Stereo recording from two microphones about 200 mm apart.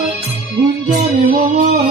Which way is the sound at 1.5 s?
35° right (ahead or behind).